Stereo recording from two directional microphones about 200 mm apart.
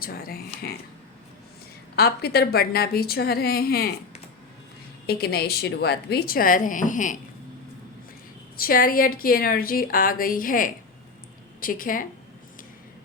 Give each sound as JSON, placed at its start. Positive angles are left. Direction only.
{"t": 0.0, "sound": "a sound", "side_deg": 45}
{"t": 2.0, "sound": "a woman's voice", "side_deg": 50}
{"t": 5.0, "sound": "a woman's voice", "side_deg": 50}
{"t": 8.5, "sound": "a woman's voice", "side_deg": 45}